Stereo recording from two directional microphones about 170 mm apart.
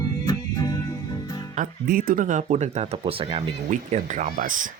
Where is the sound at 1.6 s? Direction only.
55° right (ahead or behind).